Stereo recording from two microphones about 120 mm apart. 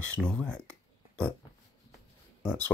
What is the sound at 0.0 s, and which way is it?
Speech, 10° left (ahead or behind).